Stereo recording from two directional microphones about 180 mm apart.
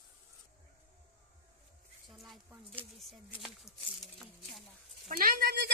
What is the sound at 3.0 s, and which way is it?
Speech, centre (ahead or behind).